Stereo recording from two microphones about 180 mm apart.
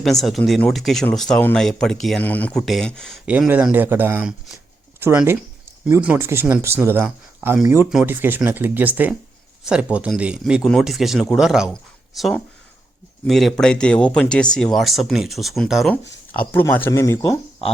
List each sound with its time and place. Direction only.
0.0 s speech: centre (ahead or behind)
3.2 s speech: 5° right (ahead or behind); by 17.3 s 15° left (ahead or behind)